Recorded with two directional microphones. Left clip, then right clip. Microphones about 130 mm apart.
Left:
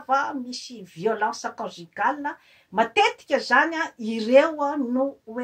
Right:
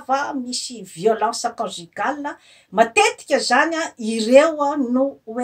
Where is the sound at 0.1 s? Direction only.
25° right (ahead or behind).